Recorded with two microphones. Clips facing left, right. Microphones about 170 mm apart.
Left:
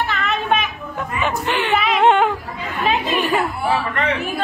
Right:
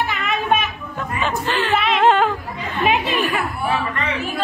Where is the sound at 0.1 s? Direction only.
10° right (ahead or behind).